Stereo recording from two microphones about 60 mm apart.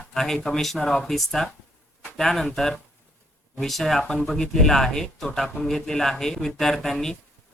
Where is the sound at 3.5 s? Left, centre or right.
Centre.